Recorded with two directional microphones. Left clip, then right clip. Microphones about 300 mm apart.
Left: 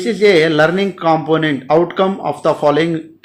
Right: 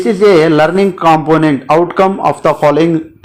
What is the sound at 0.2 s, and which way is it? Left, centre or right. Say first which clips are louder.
Speech: right 3 dB; centre.